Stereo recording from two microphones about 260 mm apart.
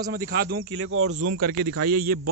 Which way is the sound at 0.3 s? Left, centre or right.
Right.